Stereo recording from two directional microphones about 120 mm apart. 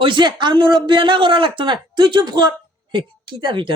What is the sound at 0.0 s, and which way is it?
A woman's voice, 40° right (ahead or behind).